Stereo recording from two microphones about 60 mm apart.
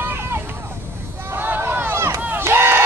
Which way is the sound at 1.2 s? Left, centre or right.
Right.